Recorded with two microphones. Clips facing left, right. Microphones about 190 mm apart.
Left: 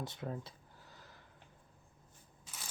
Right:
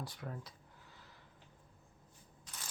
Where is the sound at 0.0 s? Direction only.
25° left (ahead or behind).